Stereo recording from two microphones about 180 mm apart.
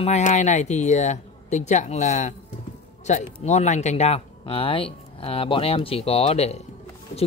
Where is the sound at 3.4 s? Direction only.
40° left (ahead or behind).